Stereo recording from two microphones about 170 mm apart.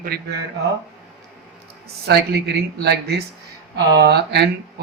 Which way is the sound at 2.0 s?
70° right (ahead or behind).